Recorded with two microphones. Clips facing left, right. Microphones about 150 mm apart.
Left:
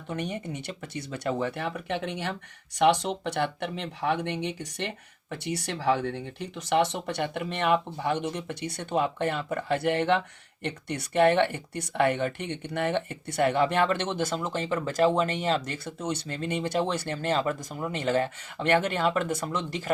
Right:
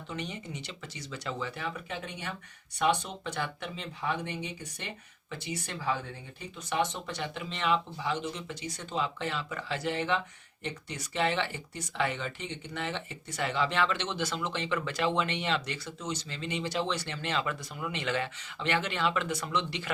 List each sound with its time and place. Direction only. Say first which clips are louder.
0.1 s speech: left 6 dB; 55° left (ahead or behind); by 2.3 s 75° left (ahead or behind)
2.7 s speech: left 6 dB; 90° left; by 19.9 s 45° left (ahead or behind)